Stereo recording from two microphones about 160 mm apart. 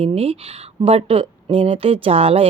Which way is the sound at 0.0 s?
40° right (ahead or behind).